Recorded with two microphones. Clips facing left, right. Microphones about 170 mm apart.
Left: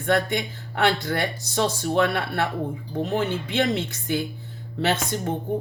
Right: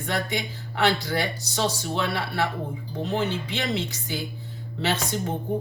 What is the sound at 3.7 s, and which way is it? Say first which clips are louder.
Speech: left 3 dB; 55° left (ahead or behind).